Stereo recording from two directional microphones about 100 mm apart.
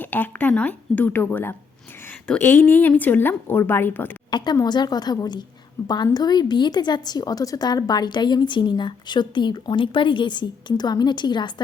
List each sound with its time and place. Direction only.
0.0 s a woman's voice: 20° left (ahead or behind)
4.3 s a woman's voice: 50° left (ahead or behind)